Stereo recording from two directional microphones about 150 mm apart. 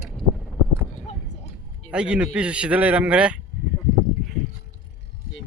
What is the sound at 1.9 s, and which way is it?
Speech, 5° right (ahead or behind).